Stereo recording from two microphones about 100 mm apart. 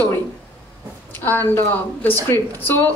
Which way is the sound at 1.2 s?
20° left (ahead or behind).